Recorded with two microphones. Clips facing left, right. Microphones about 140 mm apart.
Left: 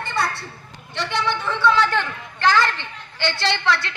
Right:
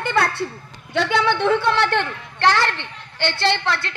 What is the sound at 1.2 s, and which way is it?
A woman's voice, 70° right (ahead or behind).